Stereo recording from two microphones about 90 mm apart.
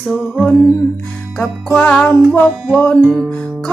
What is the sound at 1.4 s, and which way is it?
Music, 15° left (ahead or behind).